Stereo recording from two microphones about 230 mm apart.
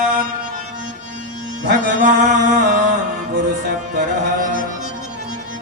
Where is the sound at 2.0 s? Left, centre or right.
Right.